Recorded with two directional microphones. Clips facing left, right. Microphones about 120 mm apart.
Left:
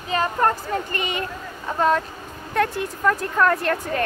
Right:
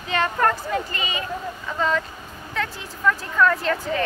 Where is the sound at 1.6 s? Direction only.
45° left (ahead or behind).